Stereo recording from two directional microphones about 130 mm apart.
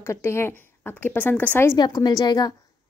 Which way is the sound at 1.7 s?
35° left (ahead or behind).